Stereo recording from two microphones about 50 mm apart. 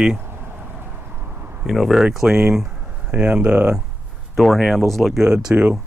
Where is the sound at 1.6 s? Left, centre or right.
Centre.